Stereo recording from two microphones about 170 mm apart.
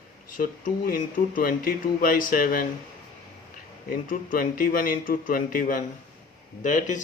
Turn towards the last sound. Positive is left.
turn(degrees=45)  # may be behind; listen again after turning